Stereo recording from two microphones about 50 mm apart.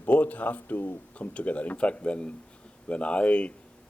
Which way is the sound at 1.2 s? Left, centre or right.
Left.